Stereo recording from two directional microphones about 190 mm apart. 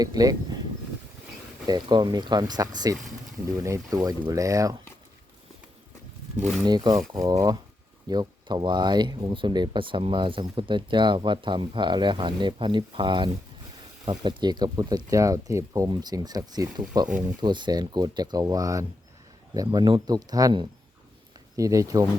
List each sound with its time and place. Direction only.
0.0 s speech: 20° right (ahead or behind)
1.6 s speech: 20° right (ahead or behind)
6.6 s speech: 20° right (ahead or behind)